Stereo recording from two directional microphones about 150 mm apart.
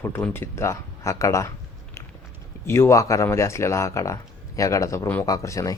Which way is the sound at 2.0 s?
20° left (ahead or behind).